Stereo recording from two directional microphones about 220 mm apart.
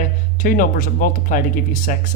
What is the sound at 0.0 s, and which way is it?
Speech, 35° left (ahead or behind).